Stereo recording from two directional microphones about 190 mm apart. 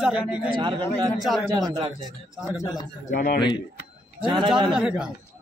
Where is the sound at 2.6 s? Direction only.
20° left (ahead or behind).